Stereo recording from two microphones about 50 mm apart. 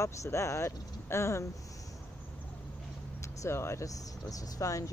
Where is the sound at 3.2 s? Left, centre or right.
Left.